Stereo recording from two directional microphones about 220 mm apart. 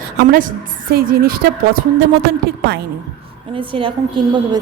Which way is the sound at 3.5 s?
25° right (ahead or behind).